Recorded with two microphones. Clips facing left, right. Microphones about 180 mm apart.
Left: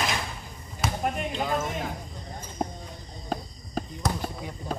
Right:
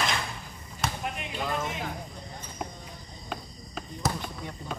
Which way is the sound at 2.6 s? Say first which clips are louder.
Left 7 dB; 40° left (ahead or behind).